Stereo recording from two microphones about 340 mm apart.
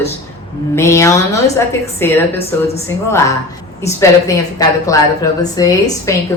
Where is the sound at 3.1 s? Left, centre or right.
Centre.